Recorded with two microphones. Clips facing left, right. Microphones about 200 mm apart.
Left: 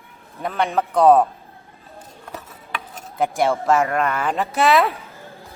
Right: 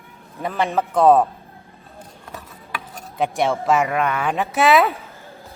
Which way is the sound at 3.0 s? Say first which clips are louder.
Left 1 dB; centre (ahead or behind).